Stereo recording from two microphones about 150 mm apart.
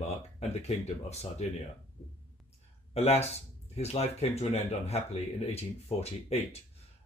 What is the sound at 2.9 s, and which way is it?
Speech, 45° left (ahead or behind).